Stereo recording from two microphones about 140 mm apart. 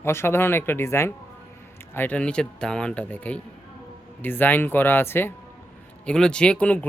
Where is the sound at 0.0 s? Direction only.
15° left (ahead or behind).